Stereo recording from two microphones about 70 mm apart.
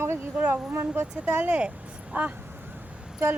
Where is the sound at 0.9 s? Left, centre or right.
Right.